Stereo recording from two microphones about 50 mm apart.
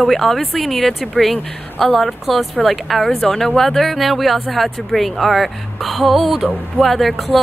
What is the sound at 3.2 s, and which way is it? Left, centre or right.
A woman's voice, centre.